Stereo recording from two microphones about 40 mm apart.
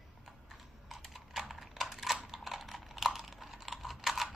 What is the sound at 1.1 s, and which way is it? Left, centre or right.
Typing, centre.